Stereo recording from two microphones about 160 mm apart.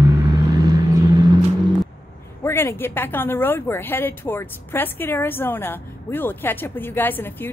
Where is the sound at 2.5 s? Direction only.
15° left (ahead or behind).